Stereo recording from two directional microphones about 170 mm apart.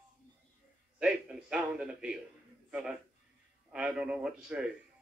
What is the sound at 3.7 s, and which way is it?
Speech, 5° right (ahead or behind).